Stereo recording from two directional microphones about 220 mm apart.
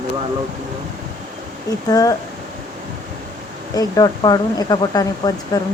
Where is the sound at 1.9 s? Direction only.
15° left (ahead or behind).